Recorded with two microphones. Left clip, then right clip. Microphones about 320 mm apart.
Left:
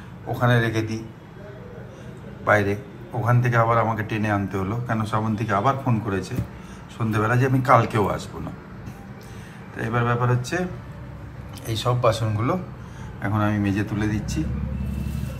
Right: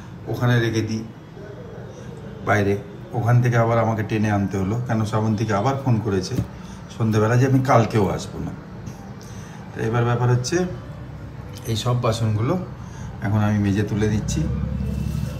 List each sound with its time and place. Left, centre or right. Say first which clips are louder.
0.3 s a man's voice: left 1 dB; centre
2.4 s a man's voice: left 1 dB; centre
9.8 s a man's voice: right 1 dB; centre